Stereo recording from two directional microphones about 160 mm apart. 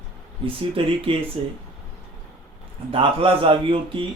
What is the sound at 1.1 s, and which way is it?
Speech, 35° right (ahead or behind).